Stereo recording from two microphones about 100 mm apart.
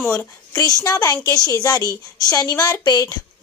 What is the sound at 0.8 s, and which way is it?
Speech, 35° left (ahead or behind).